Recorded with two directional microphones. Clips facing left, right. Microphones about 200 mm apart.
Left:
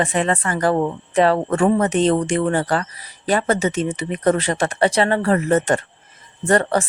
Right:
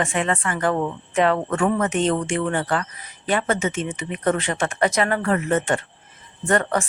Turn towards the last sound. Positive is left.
turn(degrees=35)  # may be behind; listen again after turning